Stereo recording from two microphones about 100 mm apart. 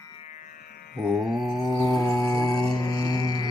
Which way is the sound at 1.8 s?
35° left (ahead or behind).